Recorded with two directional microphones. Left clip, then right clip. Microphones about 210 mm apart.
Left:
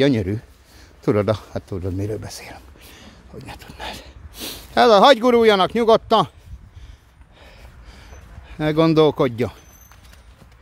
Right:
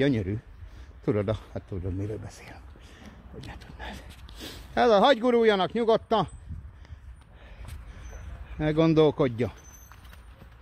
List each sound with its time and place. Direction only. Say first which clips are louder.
0.0 s speech: left 8 dB; 30° left (ahead or behind)
8.5 s speech: left 6 dB; 20° left (ahead or behind)